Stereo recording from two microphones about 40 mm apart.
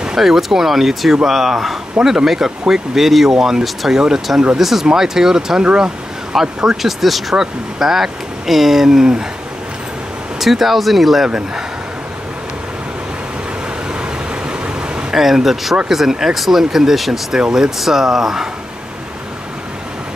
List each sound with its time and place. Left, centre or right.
0.2 s speech: centre
6.8 s speech: centre
10.4 s speech: centre
11.2 s speech: centre
14.5 s vehicle: right
15.1 s speech: centre